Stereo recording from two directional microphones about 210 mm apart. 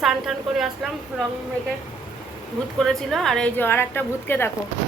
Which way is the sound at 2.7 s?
Centre (ahead or behind).